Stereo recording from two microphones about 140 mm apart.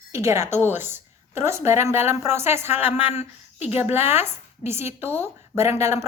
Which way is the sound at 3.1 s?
50° left (ahead or behind).